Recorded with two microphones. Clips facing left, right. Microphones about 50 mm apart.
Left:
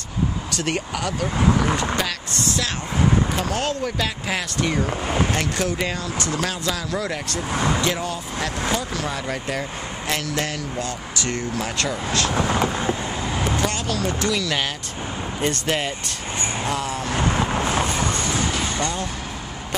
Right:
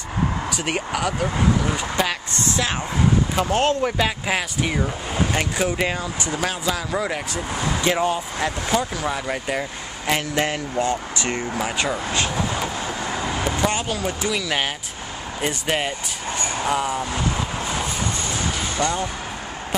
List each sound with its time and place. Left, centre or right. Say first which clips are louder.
0.5 s speech: right 1 dB; centre
2.3 s speech: even; right
3.8 s speech: right 3 dB; centre
7.8 s speech: right 4 dB; right
8.9 s speech: right 1 dB; centre
13.2 s vehicle: even; centre
13.6 s speech: right 1 dB; centre
17.1 s speech: left 2 dB; left
18.8 s speech: right 3 dB; centre